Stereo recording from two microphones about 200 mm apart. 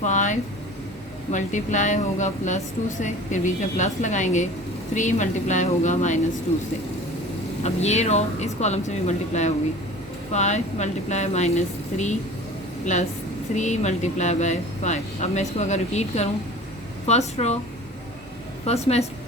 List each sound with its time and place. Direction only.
0.0 s speech: 40° left (ahead or behind)
7.6 s a woman's voice: 35° left (ahead or behind)
18.6 s speech: 30° left (ahead or behind)